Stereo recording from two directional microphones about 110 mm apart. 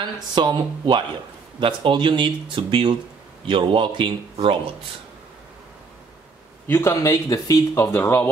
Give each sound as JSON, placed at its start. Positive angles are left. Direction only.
{"t": 0.3, "sound": "speech", "side_deg": -40}
{"t": 6.7, "sound": "speech", "side_deg": 25}